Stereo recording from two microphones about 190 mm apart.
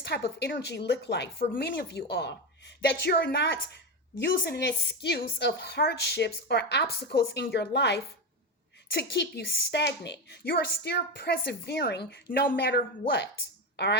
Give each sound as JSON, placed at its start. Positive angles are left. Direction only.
{"t": 0.1, "sound": "a woman's voice", "side_deg": 60}